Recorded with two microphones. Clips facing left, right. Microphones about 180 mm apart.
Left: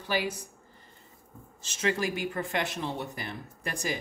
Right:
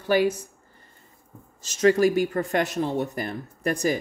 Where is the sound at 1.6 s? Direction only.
40° right (ahead or behind).